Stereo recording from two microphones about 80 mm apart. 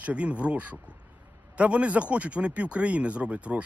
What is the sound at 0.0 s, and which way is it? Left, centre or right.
Speech, centre.